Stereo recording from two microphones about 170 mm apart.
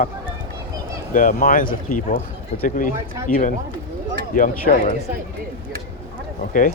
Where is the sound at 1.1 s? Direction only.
55° left (ahead or behind).